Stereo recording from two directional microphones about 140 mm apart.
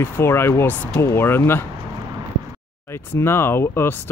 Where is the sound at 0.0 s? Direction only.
15° left (ahead or behind).